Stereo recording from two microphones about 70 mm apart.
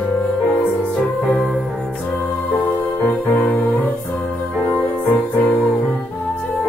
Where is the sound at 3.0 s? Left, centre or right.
Left.